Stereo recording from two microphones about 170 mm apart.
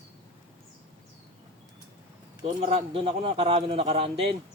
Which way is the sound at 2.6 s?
35° right (ahead or behind).